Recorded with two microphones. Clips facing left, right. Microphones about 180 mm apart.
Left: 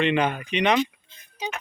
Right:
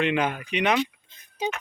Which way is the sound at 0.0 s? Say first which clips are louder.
Left 2 dB; 5° right (ahead or behind).